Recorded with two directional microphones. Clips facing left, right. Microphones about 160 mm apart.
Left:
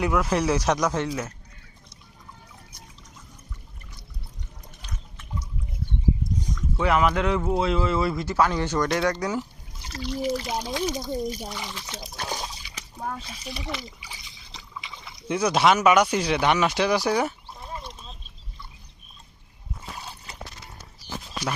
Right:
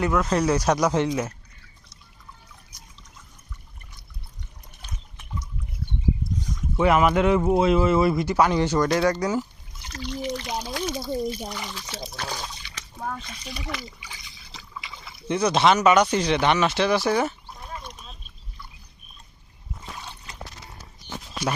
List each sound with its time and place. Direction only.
0.0 s speech: 10° left (ahead or behind); by 1.3 s 20° right (ahead or behind)
6.7 s speech: 20° right (ahead or behind); by 10.8 s 5° left (ahead or behind)
10.8 s speech: 15° left (ahead or behind)
11.4 s speech: 5° left (ahead or behind)
14.5 s boat: 5° right (ahead or behind)
15.0 s speech: 10° left (ahead or behind)
17.6 s a sound: 25° left (ahead or behind)
17.8 s a sound: 5° right (ahead or behind)